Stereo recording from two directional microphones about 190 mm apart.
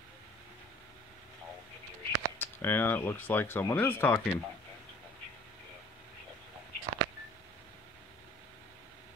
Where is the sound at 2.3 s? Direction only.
10° left (ahead or behind).